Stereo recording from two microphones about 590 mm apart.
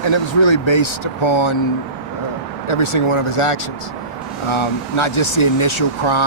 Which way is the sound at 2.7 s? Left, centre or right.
Left.